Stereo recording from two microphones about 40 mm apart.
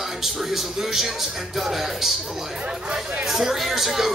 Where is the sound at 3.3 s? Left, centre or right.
Centre.